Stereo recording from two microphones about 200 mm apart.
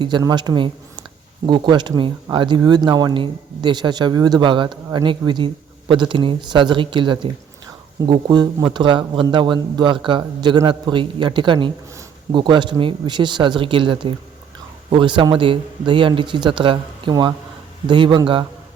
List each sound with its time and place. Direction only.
0.0 s a man's voice: 20° right (ahead or behind)